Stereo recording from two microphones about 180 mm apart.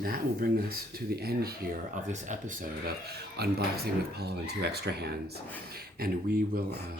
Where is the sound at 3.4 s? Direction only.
60° right (ahead or behind).